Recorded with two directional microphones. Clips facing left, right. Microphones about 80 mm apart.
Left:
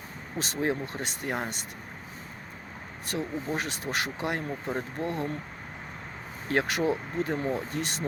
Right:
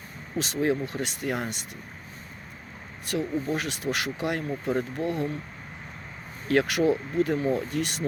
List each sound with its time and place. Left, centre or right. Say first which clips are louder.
0.3 s speech: right 4 dB; left
3.1 s speech: right 4 dB; left
6.5 s speech: right 4 dB; left